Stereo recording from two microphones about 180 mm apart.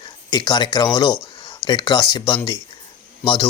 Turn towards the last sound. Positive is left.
turn(degrees=30)  # may be behind; listen again after turning